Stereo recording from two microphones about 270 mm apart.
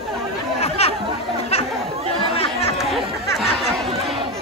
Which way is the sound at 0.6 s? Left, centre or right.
Left.